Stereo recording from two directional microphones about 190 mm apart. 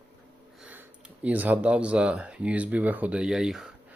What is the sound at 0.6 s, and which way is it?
Sniff, 5° right (ahead or behind).